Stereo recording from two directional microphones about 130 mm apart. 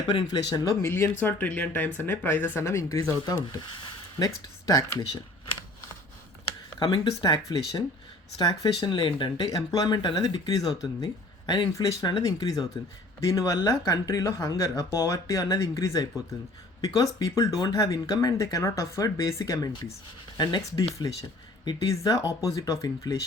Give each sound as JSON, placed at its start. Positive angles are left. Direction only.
{"t": 0.1, "sound": "speech", "side_deg": 35}
{"t": 6.7, "sound": "speech", "side_deg": 30}